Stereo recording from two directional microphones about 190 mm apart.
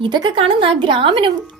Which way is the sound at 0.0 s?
25° right (ahead or behind).